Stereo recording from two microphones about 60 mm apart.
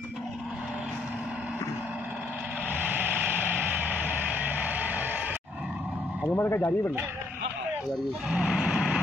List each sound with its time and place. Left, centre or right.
2.7 s vehicle: right
6.3 s speech: left
8.3 s speech: centre